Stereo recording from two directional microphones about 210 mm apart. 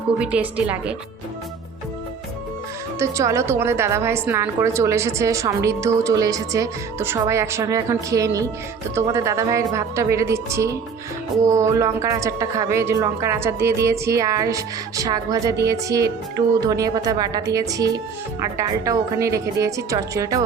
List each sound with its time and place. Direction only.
0.2 s speech: 5° right (ahead or behind)
3.0 s a woman's voice: 15° right (ahead or behind)